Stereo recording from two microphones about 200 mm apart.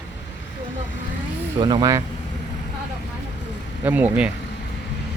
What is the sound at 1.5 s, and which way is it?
Speech, 20° right (ahead or behind).